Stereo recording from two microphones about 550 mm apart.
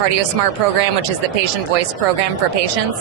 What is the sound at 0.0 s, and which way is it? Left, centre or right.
Speech, right.